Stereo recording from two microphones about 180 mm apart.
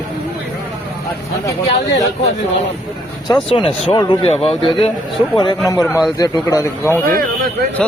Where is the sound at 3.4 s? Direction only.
30° left (ahead or behind).